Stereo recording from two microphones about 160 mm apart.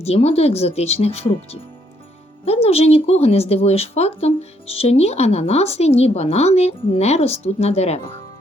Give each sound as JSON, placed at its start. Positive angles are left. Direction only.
{"t": 0.0, "sound": "speech", "side_deg": 40}
{"t": 2.4, "sound": "speech", "side_deg": 40}